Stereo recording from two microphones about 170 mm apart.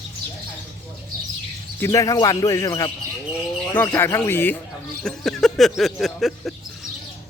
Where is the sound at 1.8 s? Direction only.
20° left (ahead or behind).